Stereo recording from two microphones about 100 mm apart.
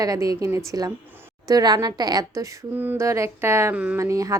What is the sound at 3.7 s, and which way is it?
Speech, 15° right (ahead or behind).